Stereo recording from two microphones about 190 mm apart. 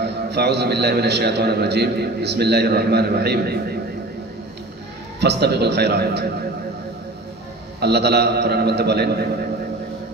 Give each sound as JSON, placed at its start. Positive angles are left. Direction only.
{"t": 0.0, "sound": "a man's voice", "side_deg": -60}
{"t": 5.2, "sound": "a man's voice", "side_deg": -60}
{"t": 7.8, "sound": "a man's voice", "side_deg": -60}